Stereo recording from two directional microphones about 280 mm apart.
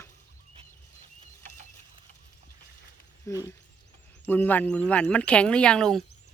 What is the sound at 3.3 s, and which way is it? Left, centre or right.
Speech, centre.